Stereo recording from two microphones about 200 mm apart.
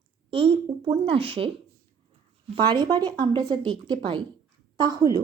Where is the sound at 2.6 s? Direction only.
20° right (ahead or behind).